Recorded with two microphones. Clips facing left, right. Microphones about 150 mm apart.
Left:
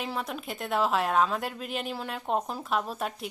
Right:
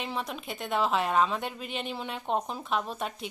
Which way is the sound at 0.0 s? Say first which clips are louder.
Left 1 dB; centre (ahead or behind).